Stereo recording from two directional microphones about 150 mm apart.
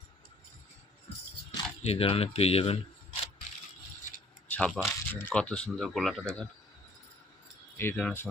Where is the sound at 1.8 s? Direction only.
40° left (ahead or behind).